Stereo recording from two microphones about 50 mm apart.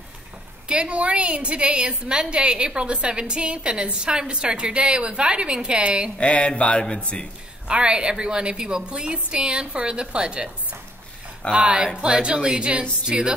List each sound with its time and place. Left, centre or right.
0.7 s a woman's voice: right
6.1 s speech: left
7.6 s a woman's voice: centre